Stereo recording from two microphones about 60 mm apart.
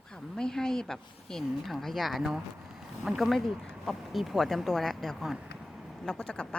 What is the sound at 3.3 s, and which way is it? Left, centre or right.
Speech, centre.